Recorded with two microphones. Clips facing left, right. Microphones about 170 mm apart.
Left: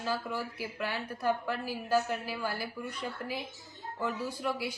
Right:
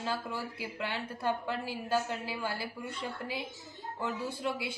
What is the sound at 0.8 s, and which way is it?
A woman's voice, 25° right (ahead or behind).